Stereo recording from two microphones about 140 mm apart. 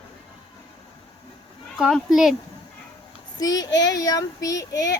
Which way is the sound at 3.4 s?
25° left (ahead or behind).